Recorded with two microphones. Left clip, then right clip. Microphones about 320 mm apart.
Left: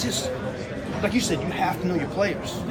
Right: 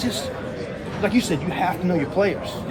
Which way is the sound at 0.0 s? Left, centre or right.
Right.